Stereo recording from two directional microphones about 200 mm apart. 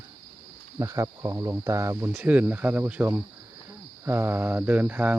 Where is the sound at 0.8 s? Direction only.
15° right (ahead or behind).